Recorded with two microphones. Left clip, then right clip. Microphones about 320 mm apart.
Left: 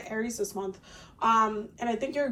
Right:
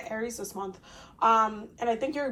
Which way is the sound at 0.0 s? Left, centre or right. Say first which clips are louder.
Left 2 dB; centre.